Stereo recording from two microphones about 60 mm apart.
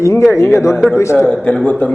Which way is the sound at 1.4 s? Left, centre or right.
Left.